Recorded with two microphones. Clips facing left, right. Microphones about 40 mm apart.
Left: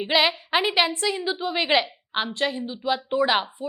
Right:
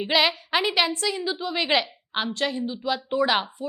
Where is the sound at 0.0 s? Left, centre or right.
Centre.